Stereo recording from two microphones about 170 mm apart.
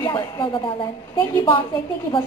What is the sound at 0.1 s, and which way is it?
Speech, 25° left (ahead or behind).